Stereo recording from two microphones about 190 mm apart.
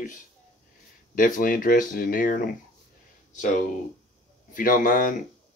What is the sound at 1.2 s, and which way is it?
Speech, 45° left (ahead or behind).